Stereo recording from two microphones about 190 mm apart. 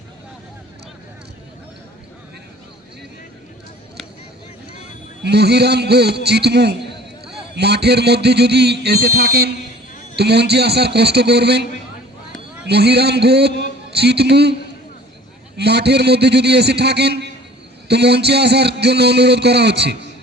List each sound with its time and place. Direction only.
5.2 s a man's voice: 60° right (ahead or behind)
12.6 s a man's voice: 60° right (ahead or behind)
15.5 s a man's voice: 60° right (ahead or behind)